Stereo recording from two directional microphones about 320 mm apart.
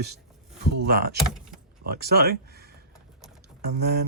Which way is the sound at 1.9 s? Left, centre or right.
Right.